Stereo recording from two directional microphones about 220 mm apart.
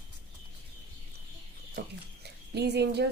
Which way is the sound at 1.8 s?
50° right (ahead or behind).